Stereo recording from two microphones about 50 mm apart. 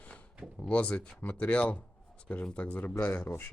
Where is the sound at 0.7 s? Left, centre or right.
Left.